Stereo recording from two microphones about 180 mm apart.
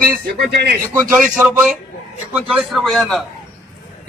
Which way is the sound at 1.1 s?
10° right (ahead or behind).